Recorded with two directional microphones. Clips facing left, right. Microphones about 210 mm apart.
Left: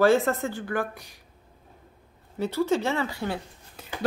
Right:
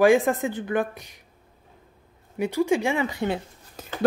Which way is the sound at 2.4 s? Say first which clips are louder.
Right 2 dB; 15° right (ahead or behind).